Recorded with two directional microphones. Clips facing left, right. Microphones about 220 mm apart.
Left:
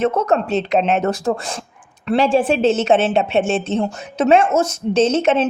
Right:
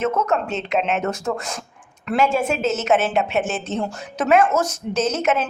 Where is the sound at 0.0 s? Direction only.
35° left (ahead or behind).